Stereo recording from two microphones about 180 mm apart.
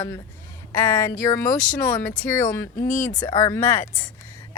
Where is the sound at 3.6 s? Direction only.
45° left (ahead or behind).